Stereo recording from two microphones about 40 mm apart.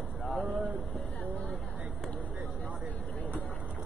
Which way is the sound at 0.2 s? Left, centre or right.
Left.